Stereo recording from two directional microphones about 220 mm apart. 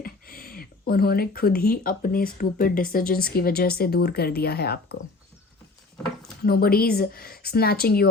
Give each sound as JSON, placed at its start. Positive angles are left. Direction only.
{"t": 0.0, "sound": "speech", "side_deg": 40}
{"t": 6.4, "sound": "speech", "side_deg": 45}